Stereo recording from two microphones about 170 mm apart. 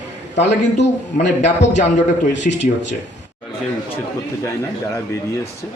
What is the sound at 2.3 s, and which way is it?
Speech, 90° left.